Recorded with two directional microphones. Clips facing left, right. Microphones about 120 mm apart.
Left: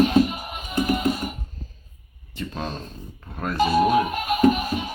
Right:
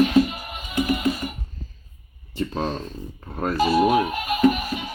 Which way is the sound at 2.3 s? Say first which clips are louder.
Right 5 dB; 35° right (ahead or behind).